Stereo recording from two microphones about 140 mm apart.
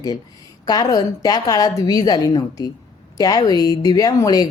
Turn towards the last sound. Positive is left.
turn(degrees=25)  # may be behind; listen again after turning